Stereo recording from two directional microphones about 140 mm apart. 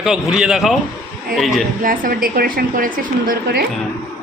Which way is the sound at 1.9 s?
90° right.